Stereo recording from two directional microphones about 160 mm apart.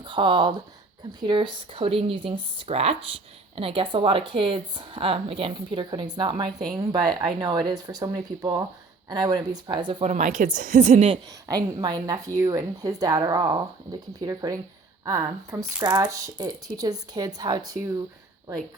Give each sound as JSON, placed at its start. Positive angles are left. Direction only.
{"t": 0.0, "sound": "speech", "side_deg": -30}
{"t": 10.0, "sound": "a woman's voice", "side_deg": -50}
{"t": 11.4, "sound": "speech", "side_deg": -25}